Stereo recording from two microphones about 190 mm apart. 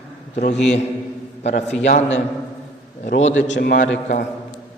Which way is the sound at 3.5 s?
55° left (ahead or behind).